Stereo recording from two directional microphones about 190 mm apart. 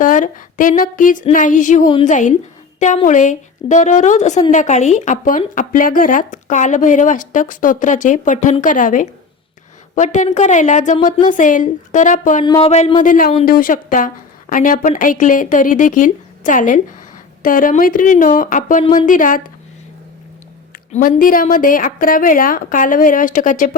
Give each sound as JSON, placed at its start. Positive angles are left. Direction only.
{"t": 0.0, "sound": "a woman's voice", "side_deg": 45}
{"t": 20.9, "sound": "a woman's voice", "side_deg": 45}